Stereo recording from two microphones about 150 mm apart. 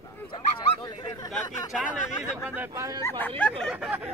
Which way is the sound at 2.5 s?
15° right (ahead or behind).